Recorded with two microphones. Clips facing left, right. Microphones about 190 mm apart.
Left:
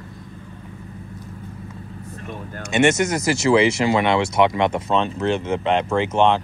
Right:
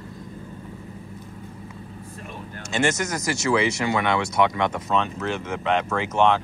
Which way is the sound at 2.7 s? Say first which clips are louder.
Left 6 dB; 25° left (ahead or behind).